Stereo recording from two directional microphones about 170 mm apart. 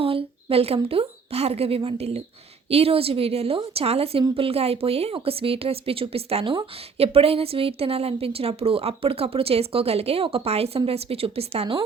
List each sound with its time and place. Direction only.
0.0 s a woman's voice: 35° right (ahead or behind)